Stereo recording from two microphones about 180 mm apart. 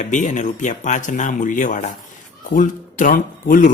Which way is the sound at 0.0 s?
45° left (ahead or behind).